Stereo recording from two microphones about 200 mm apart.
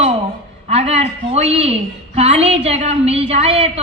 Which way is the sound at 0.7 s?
30° right (ahead or behind).